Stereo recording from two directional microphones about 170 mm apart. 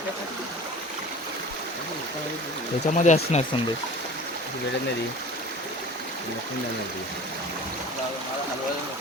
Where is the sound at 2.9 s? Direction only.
45° left (ahead or behind).